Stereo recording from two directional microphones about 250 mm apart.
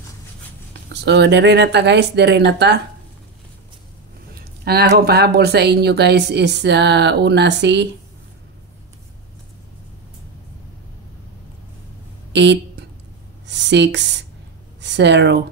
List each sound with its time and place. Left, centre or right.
0.8 s speech: right
4.4 s speech: right
12.3 s speech: right